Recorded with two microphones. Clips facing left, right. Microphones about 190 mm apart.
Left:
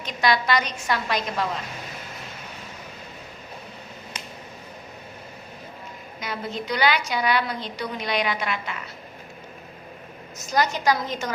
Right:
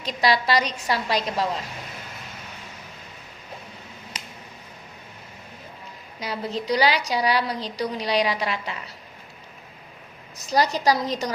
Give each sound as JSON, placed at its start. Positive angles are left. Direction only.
{"t": 0.0, "sound": "a woman's voice", "side_deg": -35}
{"t": 6.1, "sound": "a woman's voice", "side_deg": -35}
{"t": 10.3, "sound": "a woman's voice", "side_deg": -35}